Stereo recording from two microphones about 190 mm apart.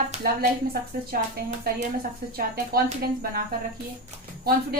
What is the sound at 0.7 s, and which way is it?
Speech, 50° right (ahead or behind).